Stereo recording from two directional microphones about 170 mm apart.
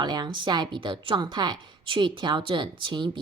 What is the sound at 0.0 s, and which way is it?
A woman's voice, 25° right (ahead or behind).